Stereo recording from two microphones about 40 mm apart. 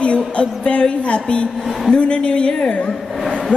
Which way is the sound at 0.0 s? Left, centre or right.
Left.